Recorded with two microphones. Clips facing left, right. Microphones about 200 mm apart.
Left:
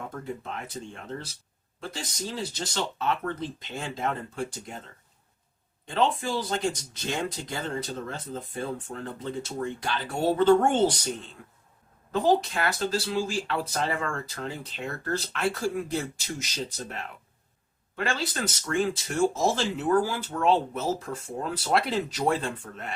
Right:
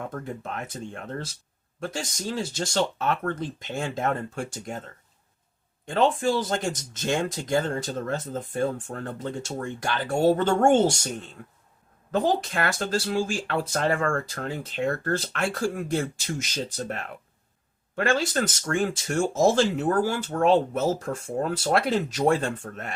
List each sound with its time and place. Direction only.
0.0 s speech: 50° right (ahead or behind)
5.8 s speech: 50° right (ahead or behind)
12.1 s speech: 55° right (ahead or behind)